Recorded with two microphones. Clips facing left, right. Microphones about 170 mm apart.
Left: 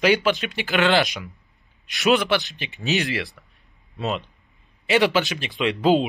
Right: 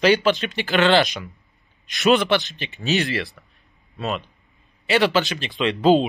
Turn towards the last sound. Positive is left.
turn(degrees=10)  # may be behind; listen again after turning